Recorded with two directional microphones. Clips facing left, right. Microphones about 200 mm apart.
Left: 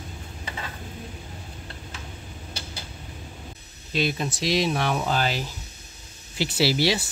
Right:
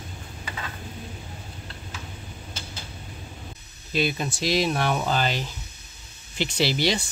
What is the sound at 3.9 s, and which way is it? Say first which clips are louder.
Speech: even; centre (ahead or behind).